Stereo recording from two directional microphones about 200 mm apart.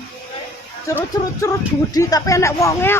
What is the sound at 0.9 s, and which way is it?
Speech, 15° left (ahead or behind).